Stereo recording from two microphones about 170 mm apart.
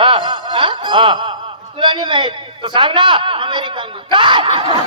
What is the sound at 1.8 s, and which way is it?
A man's voice, 30° right (ahead or behind).